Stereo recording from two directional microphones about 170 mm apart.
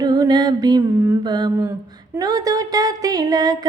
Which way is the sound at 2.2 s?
20° right (ahead or behind).